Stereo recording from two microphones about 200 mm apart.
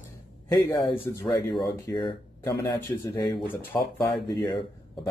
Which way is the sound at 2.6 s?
10° left (ahead or behind).